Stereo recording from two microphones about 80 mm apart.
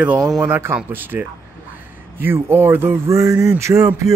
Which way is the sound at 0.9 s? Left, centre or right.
Right.